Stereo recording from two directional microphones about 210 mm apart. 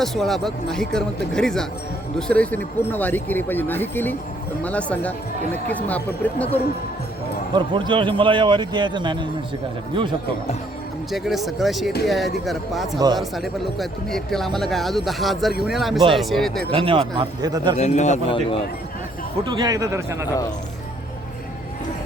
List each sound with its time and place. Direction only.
0.0 s speech: centre (ahead or behind)
7.5 s a man's voice: 20° right (ahead or behind)
11.1 s speech: centre (ahead or behind)
16.7 s a man's voice: 25° right (ahead or behind)
17.7 s speech: 35° left (ahead or behind)
19.5 s a man's voice: 20° right (ahead or behind)